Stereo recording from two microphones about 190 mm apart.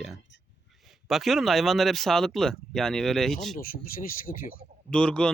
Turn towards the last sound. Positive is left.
turn(degrees=5)  # may be behind; listen again after turning